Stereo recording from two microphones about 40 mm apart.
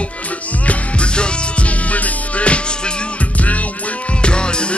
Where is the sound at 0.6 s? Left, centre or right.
Left.